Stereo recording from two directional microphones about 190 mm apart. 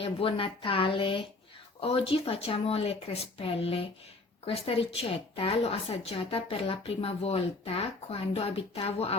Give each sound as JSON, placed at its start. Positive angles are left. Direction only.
{"t": 0.0, "sound": "a woman's voice", "side_deg": 30}